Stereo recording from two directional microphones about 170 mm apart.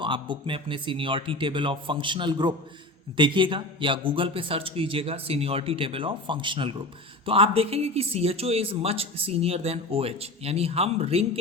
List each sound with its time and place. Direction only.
0.0 s speech: 30° right (ahead or behind)